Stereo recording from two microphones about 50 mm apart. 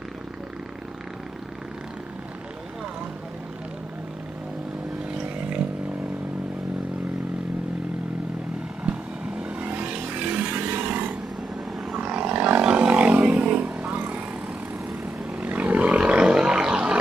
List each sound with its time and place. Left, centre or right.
8.8 s vehicle: right
9.6 s vehicle: right
10.5 s a sound: right
12.7 s vehicle: right
15.4 s vehicle: right
16.0 s roar: right